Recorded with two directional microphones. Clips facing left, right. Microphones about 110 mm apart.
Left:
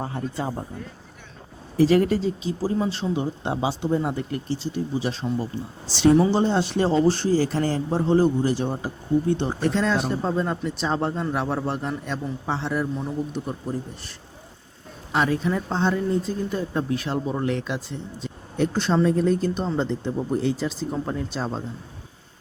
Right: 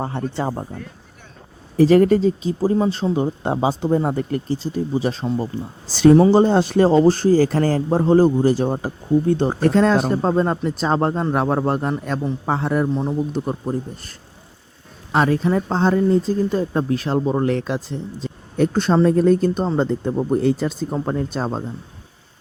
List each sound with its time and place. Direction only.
0.0 s speech: 70° right (ahead or behind)
1.8 s speech: 45° right (ahead or behind)
15.1 s speech: 40° right (ahead or behind)